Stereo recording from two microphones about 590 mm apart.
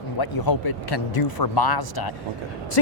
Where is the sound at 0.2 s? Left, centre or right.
Left.